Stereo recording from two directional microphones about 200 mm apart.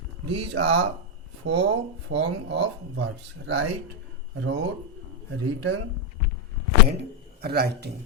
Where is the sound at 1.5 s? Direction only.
60° right (ahead or behind).